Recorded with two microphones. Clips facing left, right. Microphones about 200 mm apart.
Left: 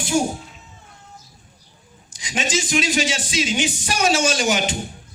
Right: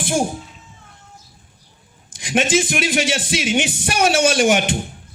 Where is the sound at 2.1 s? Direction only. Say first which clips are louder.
Right 7 dB; 55° right (ahead or behind).